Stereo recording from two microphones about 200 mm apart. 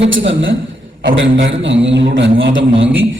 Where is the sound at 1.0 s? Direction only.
50° right (ahead or behind).